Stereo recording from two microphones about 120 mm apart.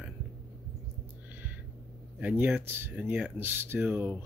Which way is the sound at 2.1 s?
10° right (ahead or behind).